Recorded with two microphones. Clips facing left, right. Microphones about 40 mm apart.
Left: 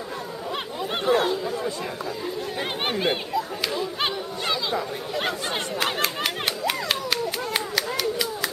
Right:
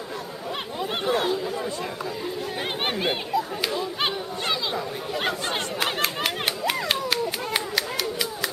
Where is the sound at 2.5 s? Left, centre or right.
Centre.